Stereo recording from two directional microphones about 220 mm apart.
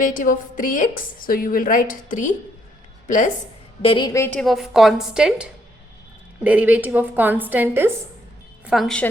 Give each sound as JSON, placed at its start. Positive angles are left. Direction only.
{"t": 0.0, "sound": "a woman's voice", "side_deg": 35}
{"t": 3.8, "sound": "a woman's voice", "side_deg": 20}
{"t": 8.6, "sound": "a woman's voice", "side_deg": 0}